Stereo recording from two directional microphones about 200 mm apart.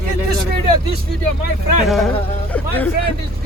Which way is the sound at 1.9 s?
Centre (ahead or behind).